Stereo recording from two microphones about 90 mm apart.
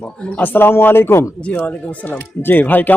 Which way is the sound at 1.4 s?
15° left (ahead or behind).